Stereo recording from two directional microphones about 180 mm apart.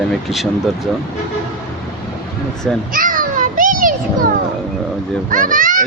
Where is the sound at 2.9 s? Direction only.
50° right (ahead or behind).